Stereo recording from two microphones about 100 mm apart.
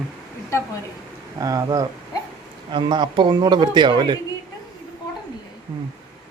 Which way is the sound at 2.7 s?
50° right (ahead or behind).